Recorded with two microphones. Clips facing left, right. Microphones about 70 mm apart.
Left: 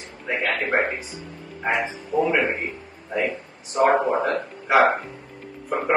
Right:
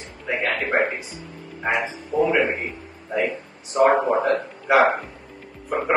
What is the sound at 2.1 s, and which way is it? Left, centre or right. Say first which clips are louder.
Speech: right 1 dB; left.